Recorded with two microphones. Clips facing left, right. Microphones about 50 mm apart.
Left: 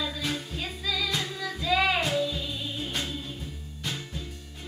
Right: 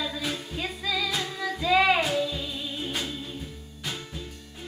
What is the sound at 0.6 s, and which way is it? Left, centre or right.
Music, centre.